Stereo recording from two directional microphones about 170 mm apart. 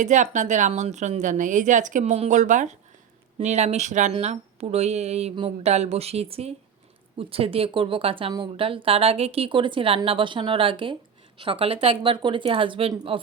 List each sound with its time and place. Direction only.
0.0 s a woman's voice: 45° right (ahead or behind)